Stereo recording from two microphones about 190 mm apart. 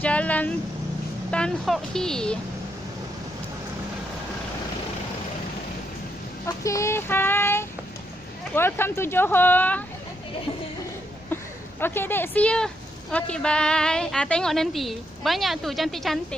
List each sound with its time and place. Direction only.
0.0 s a woman's voice: 5° left (ahead or behind)
6.4 s child singing: 15° left (ahead or behind)
8.5 s speech: 10° left (ahead or behind)
11.8 s a woman's voice: 10° left (ahead or behind)